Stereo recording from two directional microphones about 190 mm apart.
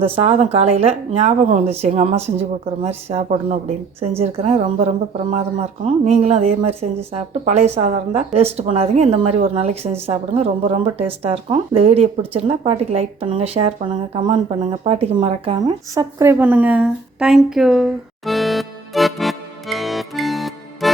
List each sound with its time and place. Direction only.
0.0 s speech: 30° right (ahead or behind); by 20.9 s centre (ahead or behind)